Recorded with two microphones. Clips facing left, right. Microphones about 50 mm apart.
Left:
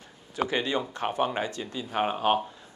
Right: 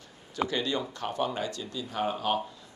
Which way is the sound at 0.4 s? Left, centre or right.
Left.